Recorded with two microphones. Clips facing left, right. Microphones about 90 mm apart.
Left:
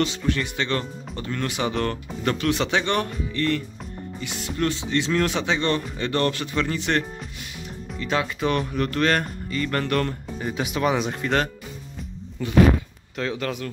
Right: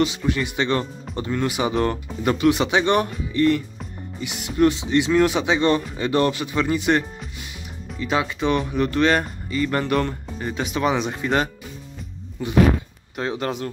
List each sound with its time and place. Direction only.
0.0 s speech: 10° right (ahead or behind)
10.4 s speech: 5° left (ahead or behind)
12.4 s speech: 20° right (ahead or behind)